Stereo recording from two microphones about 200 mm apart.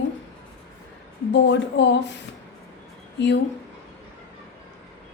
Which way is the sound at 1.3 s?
60° left (ahead or behind).